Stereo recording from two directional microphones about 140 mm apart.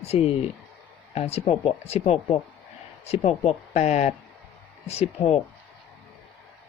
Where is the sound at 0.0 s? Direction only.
50° left (ahead or behind).